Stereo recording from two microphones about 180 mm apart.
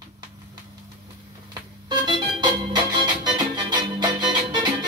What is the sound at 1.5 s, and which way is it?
Organ, 25° right (ahead or behind).